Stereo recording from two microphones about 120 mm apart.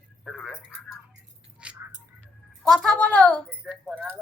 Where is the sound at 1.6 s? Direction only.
10° right (ahead or behind).